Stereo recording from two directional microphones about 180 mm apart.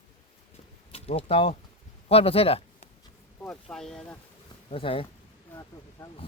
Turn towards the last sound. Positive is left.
turn(degrees=30)  # may be behind; listen again after turning